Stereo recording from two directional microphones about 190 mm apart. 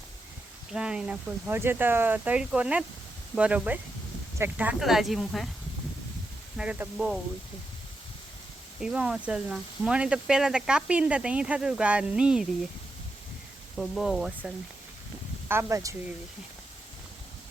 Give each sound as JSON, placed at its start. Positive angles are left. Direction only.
{"t": 0.7, "sound": "speech", "side_deg": -5}
{"t": 6.6, "sound": "speech", "side_deg": -5}
{"t": 8.8, "sound": "speech", "side_deg": -5}
{"t": 13.7, "sound": "speech", "side_deg": 0}
{"t": 15.4, "sound": "speech", "side_deg": -15}